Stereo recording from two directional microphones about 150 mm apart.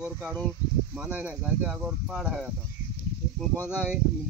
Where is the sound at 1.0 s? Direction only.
10° right (ahead or behind).